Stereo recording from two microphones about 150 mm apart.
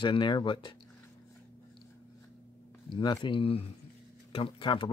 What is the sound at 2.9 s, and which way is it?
Speech, 30° left (ahead or behind).